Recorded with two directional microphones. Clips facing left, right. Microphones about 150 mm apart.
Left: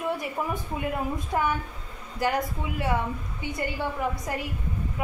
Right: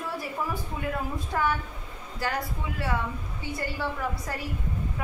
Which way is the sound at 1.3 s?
20° left (ahead or behind).